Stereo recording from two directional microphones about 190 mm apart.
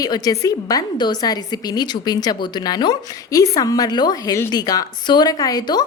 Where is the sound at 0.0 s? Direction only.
20° left (ahead or behind).